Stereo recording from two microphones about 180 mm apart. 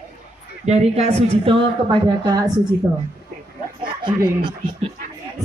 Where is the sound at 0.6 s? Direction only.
35° right (ahead or behind).